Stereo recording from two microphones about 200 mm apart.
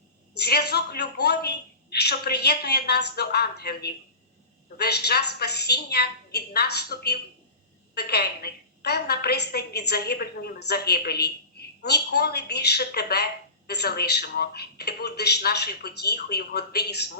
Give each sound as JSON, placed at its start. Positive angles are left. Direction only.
{"t": 0.3, "sound": "a woman's voice", "side_deg": 55}